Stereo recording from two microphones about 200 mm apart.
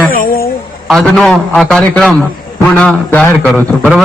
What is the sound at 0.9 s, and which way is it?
A man's voice, centre (ahead or behind).